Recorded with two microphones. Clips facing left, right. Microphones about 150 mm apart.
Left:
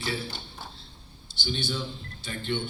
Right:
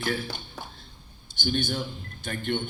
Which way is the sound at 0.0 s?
50° right (ahead or behind).